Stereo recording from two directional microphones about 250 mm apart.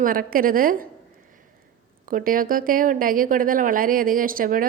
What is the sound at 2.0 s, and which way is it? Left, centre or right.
A woman's voice, right.